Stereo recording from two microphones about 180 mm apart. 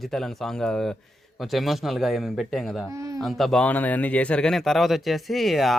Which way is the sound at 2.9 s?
15° right (ahead or behind).